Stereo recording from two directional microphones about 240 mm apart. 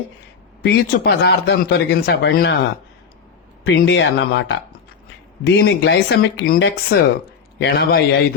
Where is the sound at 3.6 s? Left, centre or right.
Left.